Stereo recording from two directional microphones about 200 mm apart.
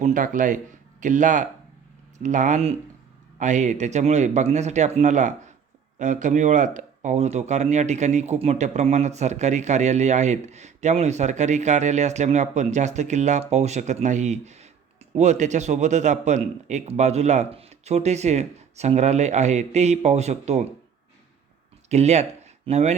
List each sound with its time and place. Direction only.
0.0 s speech: 40° right (ahead or behind)
21.8 s speech: 35° right (ahead or behind)